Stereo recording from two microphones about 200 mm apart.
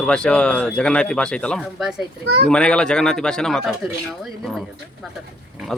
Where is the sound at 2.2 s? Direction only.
55° right (ahead or behind).